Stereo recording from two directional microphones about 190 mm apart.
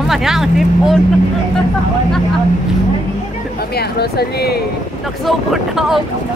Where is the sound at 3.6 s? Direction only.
55° left (ahead or behind).